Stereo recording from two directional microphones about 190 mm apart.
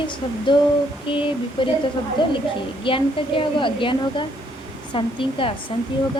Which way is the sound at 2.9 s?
25° left (ahead or behind).